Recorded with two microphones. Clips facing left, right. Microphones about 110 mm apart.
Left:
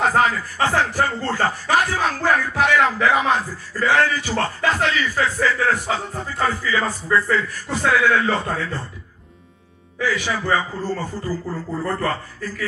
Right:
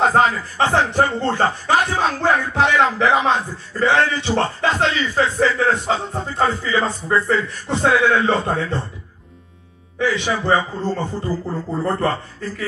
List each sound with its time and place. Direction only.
0.0 s speech: 25° right (ahead or behind)
9.9 s speech: 20° right (ahead or behind)